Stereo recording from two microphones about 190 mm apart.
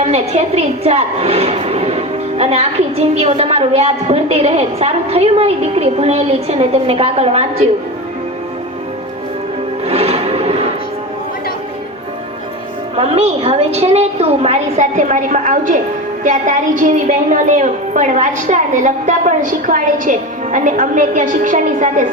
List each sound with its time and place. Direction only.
0.1 s a woman's voice: 35° right (ahead or behind)
9.8 s music: 30° right (ahead or behind)
13.0 s a woman's voice: 30° right (ahead or behind)